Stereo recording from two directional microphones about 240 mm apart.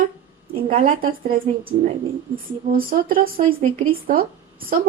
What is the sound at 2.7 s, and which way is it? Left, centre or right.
Speech, right.